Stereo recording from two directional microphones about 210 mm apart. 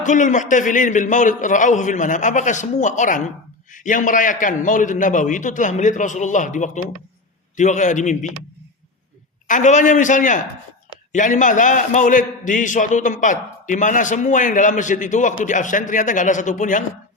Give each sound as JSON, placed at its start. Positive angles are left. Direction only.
{"t": 0.0, "sound": "a man's voice", "side_deg": 35}
{"t": 9.5, "sound": "a man's voice", "side_deg": 35}